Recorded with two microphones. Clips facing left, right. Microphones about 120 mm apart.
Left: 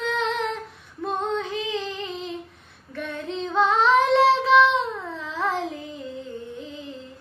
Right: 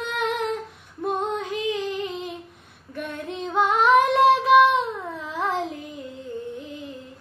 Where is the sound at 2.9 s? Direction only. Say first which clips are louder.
Left 1 dB; 15° right (ahead or behind).